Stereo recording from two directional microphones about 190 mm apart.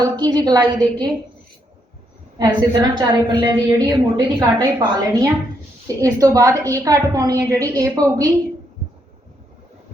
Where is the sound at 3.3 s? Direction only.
25° right (ahead or behind).